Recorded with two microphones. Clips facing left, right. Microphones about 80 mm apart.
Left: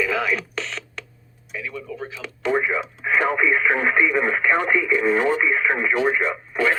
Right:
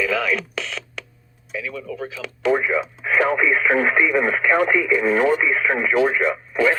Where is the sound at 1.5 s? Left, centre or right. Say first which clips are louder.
Right 2 dB; centre.